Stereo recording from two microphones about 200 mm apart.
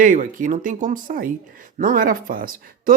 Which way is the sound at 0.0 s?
40° right (ahead or behind).